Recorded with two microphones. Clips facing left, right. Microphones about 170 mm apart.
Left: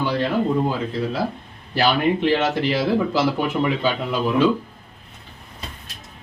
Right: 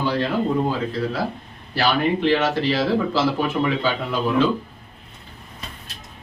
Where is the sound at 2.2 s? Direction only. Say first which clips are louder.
Even; 15° left (ahead or behind).